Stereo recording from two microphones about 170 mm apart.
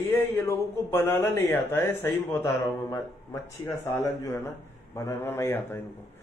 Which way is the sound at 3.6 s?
15° left (ahead or behind).